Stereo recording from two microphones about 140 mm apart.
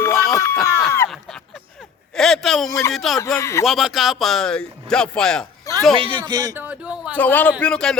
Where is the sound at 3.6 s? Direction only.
Centre (ahead or behind).